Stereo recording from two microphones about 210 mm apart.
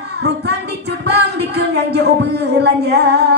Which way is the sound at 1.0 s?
50° right (ahead or behind).